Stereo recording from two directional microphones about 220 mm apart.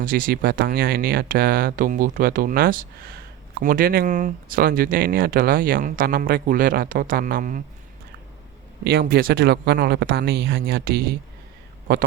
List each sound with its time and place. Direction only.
0.0 s speech: 40° right (ahead or behind)
8.8 s speech: 45° right (ahead or behind)